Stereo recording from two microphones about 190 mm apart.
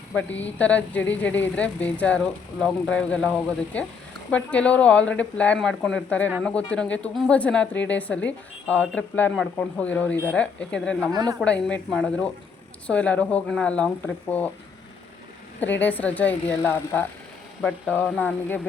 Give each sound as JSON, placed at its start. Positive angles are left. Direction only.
{"t": 0.1, "sound": "a woman's voice", "side_deg": 5}
{"t": 11.1, "sound": "speech", "side_deg": -20}
{"t": 11.3, "sound": "a woman's voice", "side_deg": 5}
{"t": 15.6, "sound": "a woman's voice", "side_deg": 10}